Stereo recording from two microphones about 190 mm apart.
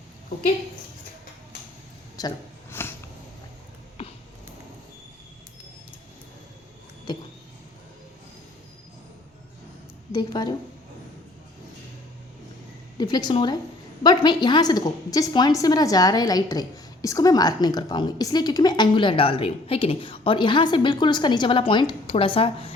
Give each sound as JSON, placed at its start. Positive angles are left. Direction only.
{"t": 2.1, "sound": "a sound", "side_deg": 15}
{"t": 10.1, "sound": "a woman's voice", "side_deg": 20}
{"t": 13.0, "sound": "a woman's voice", "side_deg": 20}